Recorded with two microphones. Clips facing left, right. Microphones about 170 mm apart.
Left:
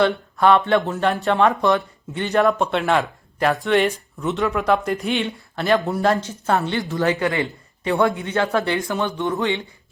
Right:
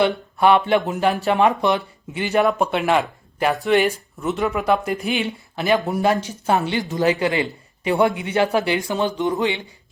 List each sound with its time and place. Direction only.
0.0 s speech: 5° right (ahead or behind)
1.4 s speech: 15° right (ahead or behind)
2.1 s speech: 5° right (ahead or behind)